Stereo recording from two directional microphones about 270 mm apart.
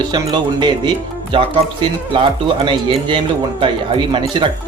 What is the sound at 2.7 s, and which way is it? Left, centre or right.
Speech, centre.